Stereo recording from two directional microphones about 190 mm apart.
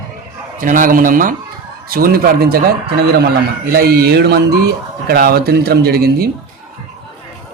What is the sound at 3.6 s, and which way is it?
A man's voice, 55° right (ahead or behind).